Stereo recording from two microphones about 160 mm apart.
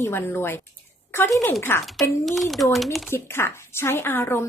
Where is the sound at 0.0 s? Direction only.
15° left (ahead or behind).